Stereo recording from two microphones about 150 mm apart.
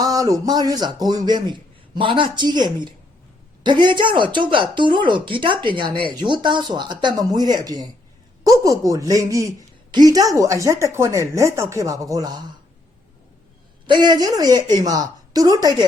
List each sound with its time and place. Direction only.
0.0 s a woman's voice: 25° right (ahead or behind)
13.8 s a woman's voice: 30° right (ahead or behind)